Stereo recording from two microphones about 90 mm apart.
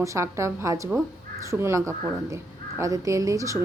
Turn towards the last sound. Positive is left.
turn(degrees=-35)  # may be behind; listen again after turning